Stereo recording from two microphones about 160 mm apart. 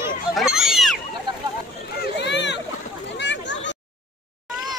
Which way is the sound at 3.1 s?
90° left.